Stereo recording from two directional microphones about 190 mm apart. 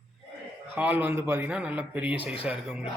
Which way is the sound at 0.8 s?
10° right (ahead or behind).